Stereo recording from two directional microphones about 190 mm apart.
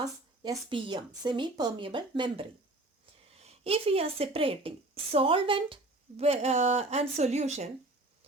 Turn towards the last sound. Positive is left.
turn(degrees=-35)  # may be behind; listen again after turning